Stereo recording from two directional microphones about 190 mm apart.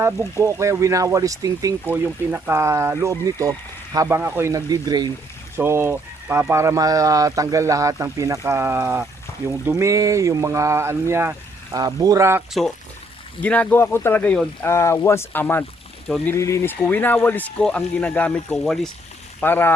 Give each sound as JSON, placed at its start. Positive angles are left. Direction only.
{"t": 0.0, "sound": "speech", "side_deg": -15}
{"t": 13.4, "sound": "speech", "side_deg": 10}